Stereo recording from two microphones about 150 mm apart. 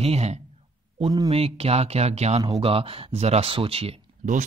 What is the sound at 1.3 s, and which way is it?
Speech, 40° right (ahead or behind).